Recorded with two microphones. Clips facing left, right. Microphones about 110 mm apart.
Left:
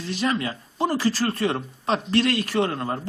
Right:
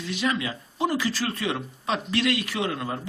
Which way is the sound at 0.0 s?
40° left (ahead or behind).